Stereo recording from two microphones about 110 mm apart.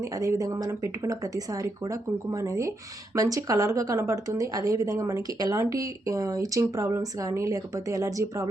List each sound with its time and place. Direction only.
0.0 s speech: 30° right (ahead or behind)